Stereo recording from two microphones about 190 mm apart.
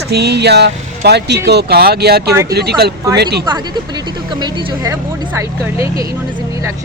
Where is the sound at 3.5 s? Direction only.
25° right (ahead or behind).